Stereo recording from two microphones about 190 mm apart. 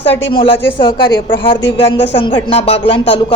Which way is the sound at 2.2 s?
25° left (ahead or behind).